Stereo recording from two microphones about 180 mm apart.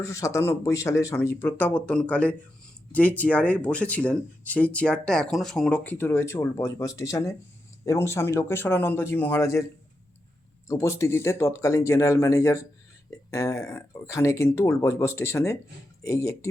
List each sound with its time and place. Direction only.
0.0 s speech: 15° left (ahead or behind)
10.7 s speech: 15° left (ahead or behind)